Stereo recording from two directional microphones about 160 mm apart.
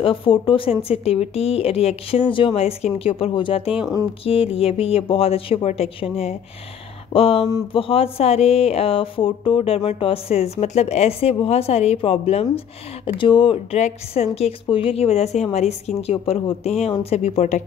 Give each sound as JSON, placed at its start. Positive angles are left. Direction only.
{"t": 0.0, "sound": "speech", "side_deg": 35}